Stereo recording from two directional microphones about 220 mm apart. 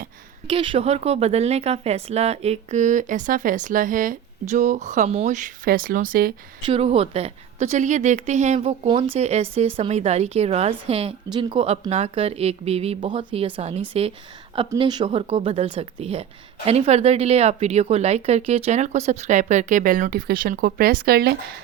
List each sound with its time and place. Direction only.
0.4 s speech: 25° right (ahead or behind); by 6.3 s 40° right (ahead or behind)
6.7 s a woman's voice: 25° right (ahead or behind)
14.7 s a woman's voice: 20° right (ahead or behind); by 21.3 s 45° right (ahead or behind)